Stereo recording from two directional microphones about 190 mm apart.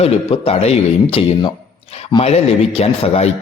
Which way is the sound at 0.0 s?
30° left (ahead or behind).